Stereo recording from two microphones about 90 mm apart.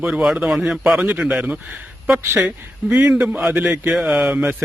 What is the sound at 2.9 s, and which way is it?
A man's voice, 15° right (ahead or behind).